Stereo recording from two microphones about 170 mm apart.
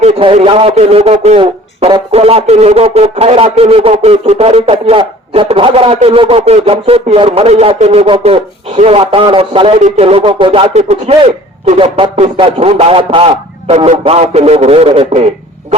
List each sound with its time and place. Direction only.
0.0 s a man's voice: 35° right (ahead or behind)